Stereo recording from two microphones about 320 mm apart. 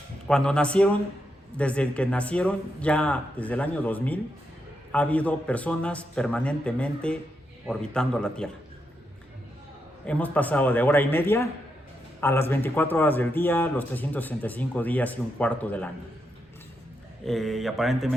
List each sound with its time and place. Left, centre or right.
0.3 s a man's voice: centre
10.1 s a man's voice: centre
17.2 s a man's voice: centre